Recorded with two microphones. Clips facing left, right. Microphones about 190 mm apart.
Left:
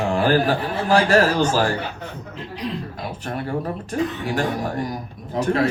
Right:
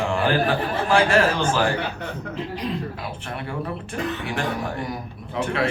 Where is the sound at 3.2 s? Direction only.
40° left (ahead or behind).